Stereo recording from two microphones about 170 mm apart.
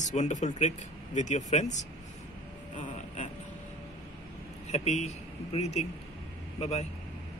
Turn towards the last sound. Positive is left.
turn(degrees=40)  # may be behind; listen again after turning